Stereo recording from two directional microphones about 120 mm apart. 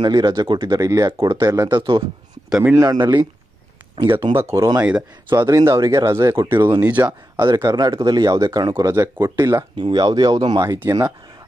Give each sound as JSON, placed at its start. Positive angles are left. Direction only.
{"t": 0.0, "sound": "speech", "side_deg": -35}
{"t": 4.4, "sound": "speech", "side_deg": -25}
{"t": 5.4, "sound": "speech", "side_deg": -35}
{"t": 5.7, "sound": "speech", "side_deg": -25}
{"t": 6.8, "sound": "speech", "side_deg": -10}
{"t": 7.4, "sound": "speech", "side_deg": -35}
{"t": 9.8, "sound": "speech", "side_deg": -40}